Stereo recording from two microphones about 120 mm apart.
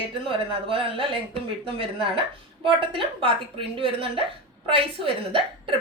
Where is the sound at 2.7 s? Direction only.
45° right (ahead or behind).